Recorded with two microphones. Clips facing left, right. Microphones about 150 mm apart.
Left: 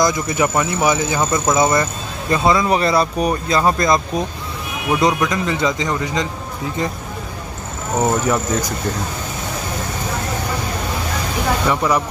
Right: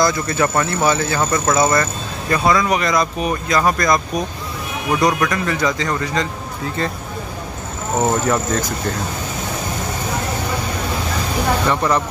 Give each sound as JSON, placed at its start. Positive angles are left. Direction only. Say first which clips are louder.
{"t": 0.0, "sound": "speech", "louder": "even", "side_deg": 15}
{"t": 5.0, "sound": "speech", "louder": "even", "side_deg": 20}
{"t": 8.0, "sound": "speech", "louder": "even", "side_deg": 10}
{"t": 11.6, "sound": "speech", "louder": "left 1 dB", "side_deg": 5}